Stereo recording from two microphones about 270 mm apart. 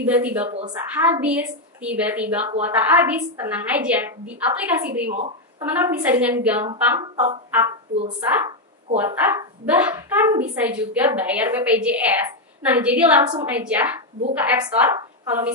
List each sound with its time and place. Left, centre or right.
0.0 s a woman's voice: centre
0.5 s a woman's voice: right
0.9 s a woman's voice: centre
7.9 s speech: right
8.9 s a woman's voice: centre